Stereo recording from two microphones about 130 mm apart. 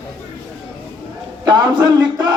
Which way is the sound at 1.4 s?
35° right (ahead or behind).